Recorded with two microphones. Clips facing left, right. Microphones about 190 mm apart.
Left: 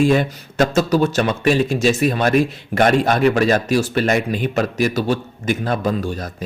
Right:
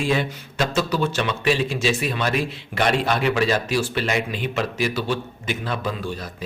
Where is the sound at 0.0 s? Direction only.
45° left (ahead or behind).